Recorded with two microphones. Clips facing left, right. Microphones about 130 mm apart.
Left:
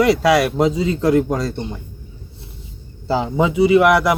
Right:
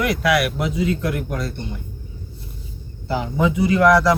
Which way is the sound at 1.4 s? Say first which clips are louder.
Left 5 dB; 90° left.